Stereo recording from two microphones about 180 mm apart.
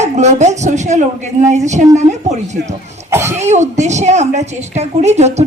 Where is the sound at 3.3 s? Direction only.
40° right (ahead or behind).